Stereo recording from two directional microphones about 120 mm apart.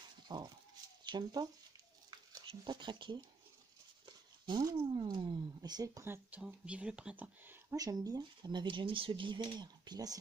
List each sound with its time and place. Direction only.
0.3 s speech: 35° right (ahead or behind)
2.0 s a sound: 40° right (ahead or behind)
6.0 s speech: 20° right (ahead or behind)
7.7 s speech: 30° right (ahead or behind)